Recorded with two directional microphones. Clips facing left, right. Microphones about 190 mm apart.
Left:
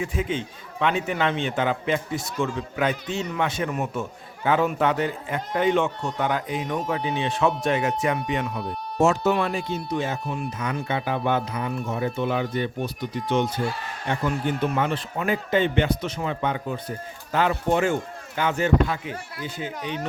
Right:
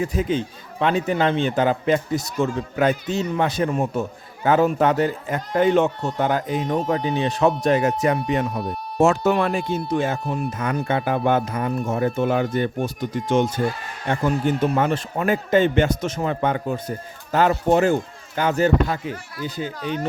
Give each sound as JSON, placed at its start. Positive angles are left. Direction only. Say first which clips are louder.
{"t": 0.0, "sound": "speech", "louder": "right 5 dB", "side_deg": -40}
{"t": 9.0, "sound": "speech", "louder": "right 3 dB", "side_deg": -55}